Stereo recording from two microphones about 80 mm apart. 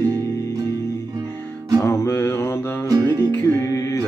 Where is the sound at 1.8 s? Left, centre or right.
Left.